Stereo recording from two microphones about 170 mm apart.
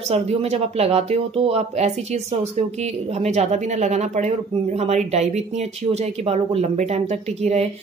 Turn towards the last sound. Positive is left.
turn(degrees=-40)  # may be behind; listen again after turning